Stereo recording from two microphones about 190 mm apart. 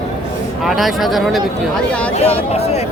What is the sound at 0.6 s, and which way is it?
Speech, centre (ahead or behind).